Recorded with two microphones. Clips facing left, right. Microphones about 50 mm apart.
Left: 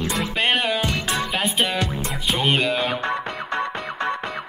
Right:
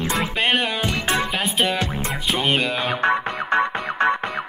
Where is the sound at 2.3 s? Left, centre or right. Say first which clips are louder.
Left 1 dB; centre.